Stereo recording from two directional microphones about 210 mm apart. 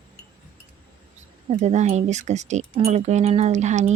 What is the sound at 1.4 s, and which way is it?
Speech, 35° right (ahead or behind).